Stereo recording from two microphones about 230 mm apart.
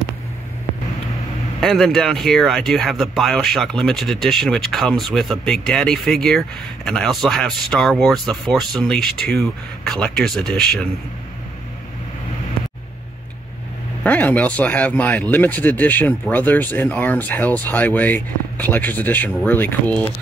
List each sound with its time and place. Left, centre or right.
1.6 s speech: centre
14.0 s speech: centre